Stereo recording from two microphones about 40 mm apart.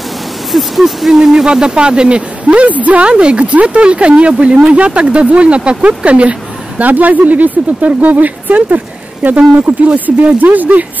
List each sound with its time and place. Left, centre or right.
0.5 s speech: centre
1.1 s speech: centre; by 3.1 s right
3.1 s speech: right
6.8 s speech: right